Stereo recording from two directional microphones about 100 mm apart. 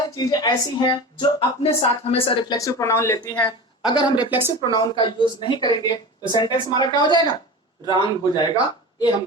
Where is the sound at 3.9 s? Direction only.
50° left (ahead or behind).